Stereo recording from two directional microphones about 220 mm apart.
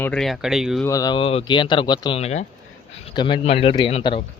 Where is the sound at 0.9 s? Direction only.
15° left (ahead or behind).